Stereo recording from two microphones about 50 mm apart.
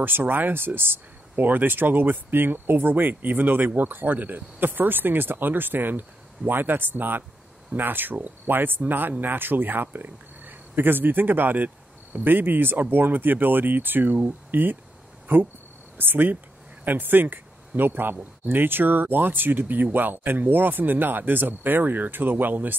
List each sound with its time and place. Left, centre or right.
0.0 s speech: right